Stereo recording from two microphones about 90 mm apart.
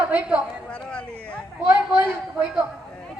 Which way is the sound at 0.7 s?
10° left (ahead or behind).